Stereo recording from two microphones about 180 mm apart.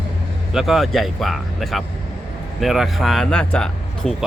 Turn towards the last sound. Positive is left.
turn(degrees=5)  # may be behind; listen again after turning